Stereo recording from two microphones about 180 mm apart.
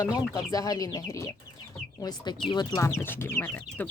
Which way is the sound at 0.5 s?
20° left (ahead or behind).